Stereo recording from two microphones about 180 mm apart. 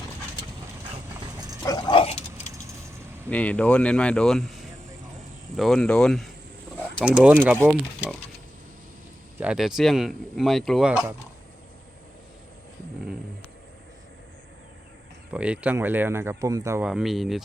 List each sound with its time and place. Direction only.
1.6 s dog: 25° left (ahead or behind)
3.2 s speech: 10° left (ahead or behind); by 7.8 s 10° right (ahead or behind)
9.4 s speech: 5° right (ahead or behind)
15.3 s speech: 5° right (ahead or behind)
16.8 s speech: centre (ahead or behind)